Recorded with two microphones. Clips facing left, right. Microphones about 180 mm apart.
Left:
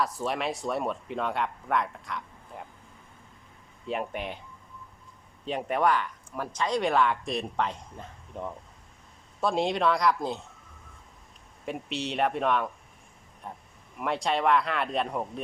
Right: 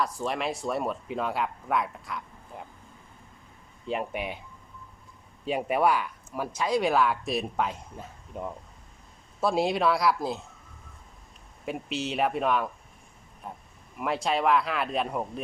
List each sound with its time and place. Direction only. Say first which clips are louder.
0.0 s speech: even; centre (ahead or behind)
3.8 s speech: right 1 dB; 5° right (ahead or behind)
5.5 s speech: right 1 dB; 10° right (ahead or behind)
11.6 s speech: right 1 dB; centre (ahead or behind)